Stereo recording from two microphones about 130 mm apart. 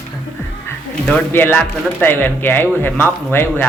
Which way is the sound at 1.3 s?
15° left (ahead or behind).